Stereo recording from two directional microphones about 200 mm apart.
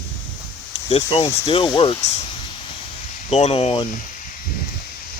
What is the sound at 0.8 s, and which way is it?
Speech, 30° left (ahead or behind).